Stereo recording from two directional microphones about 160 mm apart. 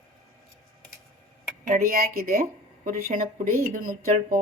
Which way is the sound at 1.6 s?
60° right (ahead or behind).